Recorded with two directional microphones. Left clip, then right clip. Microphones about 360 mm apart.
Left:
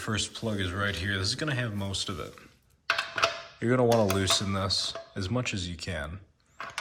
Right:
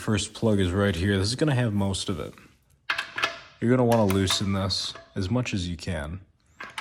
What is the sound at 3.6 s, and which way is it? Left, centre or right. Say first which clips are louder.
Speech: right 2 dB; centre.